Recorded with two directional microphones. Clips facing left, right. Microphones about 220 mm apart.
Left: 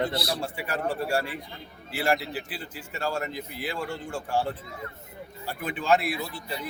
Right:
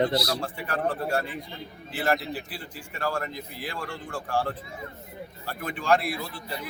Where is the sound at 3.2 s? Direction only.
5° left (ahead or behind).